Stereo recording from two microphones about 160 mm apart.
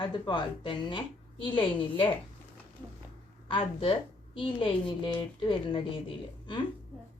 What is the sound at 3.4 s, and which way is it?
A woman's voice, 30° left (ahead or behind).